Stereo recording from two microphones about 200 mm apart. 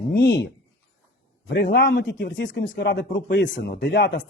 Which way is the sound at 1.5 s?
55° left (ahead or behind).